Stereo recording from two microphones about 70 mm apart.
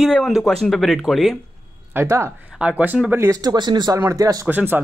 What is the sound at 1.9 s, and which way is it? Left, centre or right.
Speech, right.